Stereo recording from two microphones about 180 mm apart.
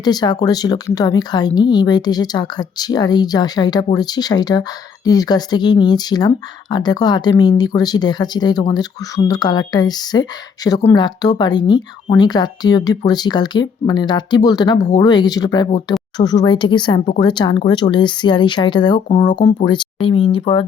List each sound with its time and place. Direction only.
0.0 s speech: 20° left (ahead or behind)